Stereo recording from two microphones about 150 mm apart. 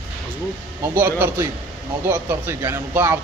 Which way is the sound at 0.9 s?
15° right (ahead or behind).